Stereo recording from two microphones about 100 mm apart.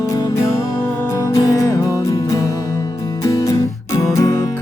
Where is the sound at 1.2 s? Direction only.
35° left (ahead or behind).